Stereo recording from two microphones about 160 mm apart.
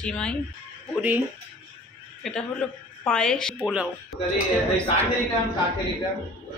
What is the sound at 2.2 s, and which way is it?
A woman's voice, centre (ahead or behind).